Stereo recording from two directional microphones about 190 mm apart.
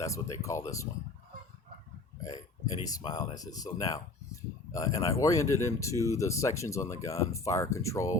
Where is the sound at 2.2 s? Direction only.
20° left (ahead or behind).